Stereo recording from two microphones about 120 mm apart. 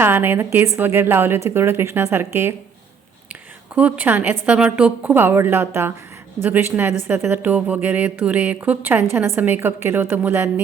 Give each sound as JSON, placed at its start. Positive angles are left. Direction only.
{"t": 0.0, "sound": "a woman's voice", "side_deg": -15}
{"t": 3.8, "sound": "a woman's voice", "side_deg": -10}